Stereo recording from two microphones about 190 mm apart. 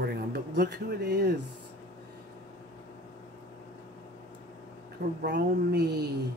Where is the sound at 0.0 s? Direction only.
55° right (ahead or behind).